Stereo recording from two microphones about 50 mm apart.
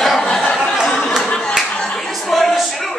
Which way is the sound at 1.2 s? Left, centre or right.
Centre.